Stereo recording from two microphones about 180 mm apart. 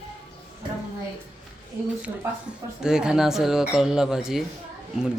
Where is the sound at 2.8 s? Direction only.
5° right (ahead or behind).